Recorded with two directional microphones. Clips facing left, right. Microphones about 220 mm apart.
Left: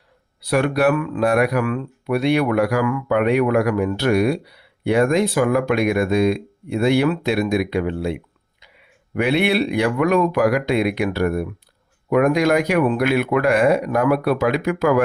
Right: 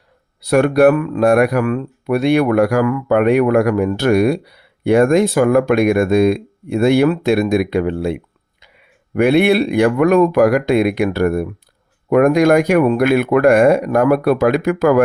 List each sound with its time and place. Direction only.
0.4 s speech: 45° right (ahead or behind)
9.1 s speech: 50° right (ahead or behind)